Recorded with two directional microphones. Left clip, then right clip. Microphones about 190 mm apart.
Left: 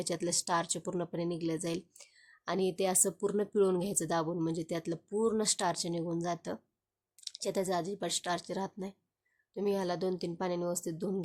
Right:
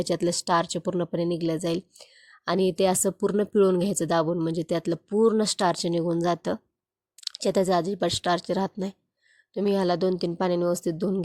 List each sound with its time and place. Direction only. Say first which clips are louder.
0.0 s speech: right 9 dB; 35° right (ahead or behind)